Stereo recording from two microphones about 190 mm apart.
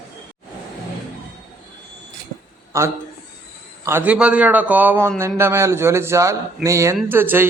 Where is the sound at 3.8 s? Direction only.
10° right (ahead or behind).